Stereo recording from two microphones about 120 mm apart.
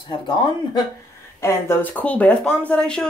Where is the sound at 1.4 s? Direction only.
20° left (ahead or behind).